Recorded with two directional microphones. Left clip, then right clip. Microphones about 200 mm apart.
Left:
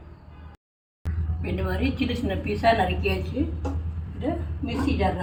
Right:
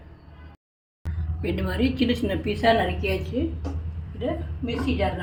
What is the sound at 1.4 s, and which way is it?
A woman's voice, 45° right (ahead or behind).